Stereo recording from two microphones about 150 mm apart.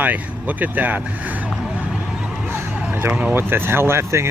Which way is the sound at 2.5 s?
15° right (ahead or behind).